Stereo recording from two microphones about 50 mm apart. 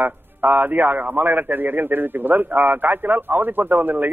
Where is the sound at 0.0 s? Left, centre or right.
Right.